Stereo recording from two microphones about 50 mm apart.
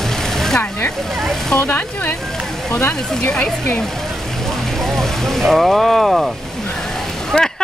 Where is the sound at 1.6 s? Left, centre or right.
Left.